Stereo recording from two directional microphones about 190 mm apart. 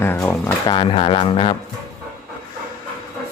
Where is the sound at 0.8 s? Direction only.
25° left (ahead or behind).